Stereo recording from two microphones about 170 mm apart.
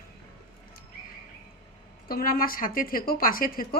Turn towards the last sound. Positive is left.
turn(degrees=55)  # may be behind; listen again after turning